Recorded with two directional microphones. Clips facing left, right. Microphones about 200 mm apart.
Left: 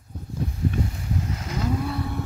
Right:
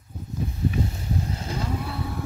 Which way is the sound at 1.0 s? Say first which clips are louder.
Even; 30° right (ahead or behind).